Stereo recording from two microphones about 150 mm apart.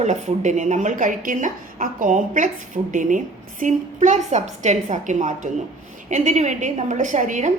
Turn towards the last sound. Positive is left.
turn(degrees=-55)  # may be behind; listen again after turning